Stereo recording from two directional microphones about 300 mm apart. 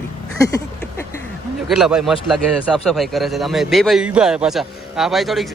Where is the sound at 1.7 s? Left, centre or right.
Centre.